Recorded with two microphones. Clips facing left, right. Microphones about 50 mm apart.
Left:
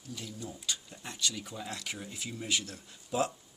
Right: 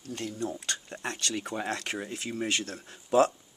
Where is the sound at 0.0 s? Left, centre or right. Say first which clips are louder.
Right 8 dB; right.